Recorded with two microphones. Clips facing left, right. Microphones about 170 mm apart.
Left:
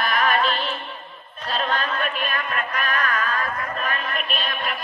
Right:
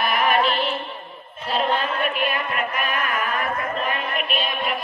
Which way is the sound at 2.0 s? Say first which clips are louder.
Right 3 dB; 10° right (ahead or behind).